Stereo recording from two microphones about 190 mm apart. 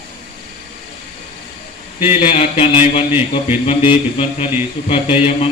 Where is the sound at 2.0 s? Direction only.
30° left (ahead or behind).